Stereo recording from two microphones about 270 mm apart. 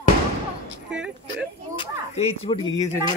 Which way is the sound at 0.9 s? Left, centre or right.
Centre.